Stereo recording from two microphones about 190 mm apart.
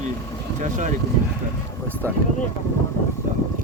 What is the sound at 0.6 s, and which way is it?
Speech, 40° right (ahead or behind).